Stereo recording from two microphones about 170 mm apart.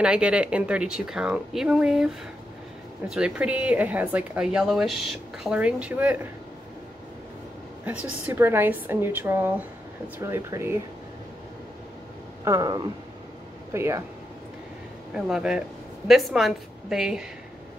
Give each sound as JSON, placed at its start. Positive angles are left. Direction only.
{"t": 0.0, "sound": "a woman's voice", "side_deg": -5}
{"t": 7.8, "sound": "a woman's voice", "side_deg": -10}
{"t": 12.4, "sound": "a woman's voice", "side_deg": -20}
{"t": 15.1, "sound": "speech", "side_deg": -5}